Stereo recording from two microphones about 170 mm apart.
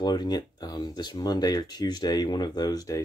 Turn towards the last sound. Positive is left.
turn(degrees=20)  # may be behind; listen again after turning